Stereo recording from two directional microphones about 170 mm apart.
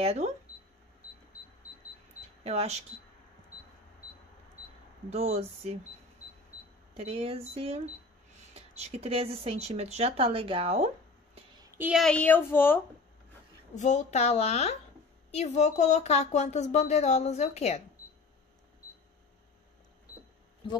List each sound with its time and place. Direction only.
0.0 s speech: 35° right (ahead or behind)
2.4 s speech: 40° right (ahead or behind)
5.1 s speech: 40° right (ahead or behind)
6.9 s speech: 35° right (ahead or behind)
11.9 s speech: 5° left (ahead or behind)
13.7 s speech: 45° left (ahead or behind)